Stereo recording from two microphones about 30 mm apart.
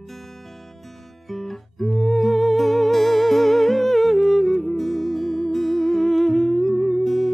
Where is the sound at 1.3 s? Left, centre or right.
Centre.